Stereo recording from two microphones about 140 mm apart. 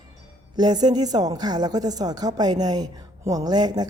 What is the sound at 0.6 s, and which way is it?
A woman's voice, 30° right (ahead or behind).